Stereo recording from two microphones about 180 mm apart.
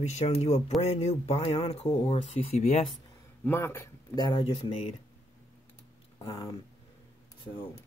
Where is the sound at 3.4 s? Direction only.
15° left (ahead or behind); by 5.0 s 35° left (ahead or behind).